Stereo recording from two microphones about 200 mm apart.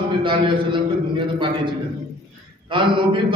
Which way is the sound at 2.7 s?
25° right (ahead or behind).